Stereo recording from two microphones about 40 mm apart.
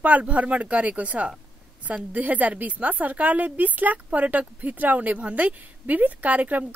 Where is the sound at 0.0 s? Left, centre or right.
Right.